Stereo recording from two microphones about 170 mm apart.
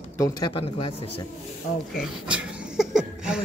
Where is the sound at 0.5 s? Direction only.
35° left (ahead or behind).